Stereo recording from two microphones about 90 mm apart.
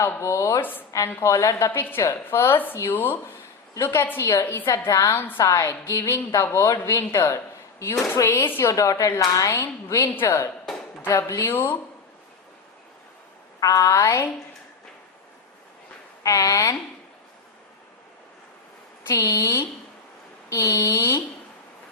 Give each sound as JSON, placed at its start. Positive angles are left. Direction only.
{"t": 0.0, "sound": "a woman's voice", "side_deg": 30}
{"t": 5.1, "sound": "speech", "side_deg": 20}
{"t": 5.4, "sound": "a woman's voice", "side_deg": 35}
{"t": 13.6, "sound": "a woman's voice", "side_deg": 40}
{"t": 16.2, "sound": "a woman's voice", "side_deg": 40}
{"t": 19.0, "sound": "a woman's voice", "side_deg": 35}